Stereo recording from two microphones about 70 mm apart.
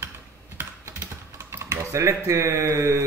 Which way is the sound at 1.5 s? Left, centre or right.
Right.